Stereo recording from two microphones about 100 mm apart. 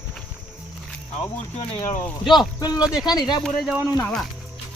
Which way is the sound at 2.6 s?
40° left (ahead or behind).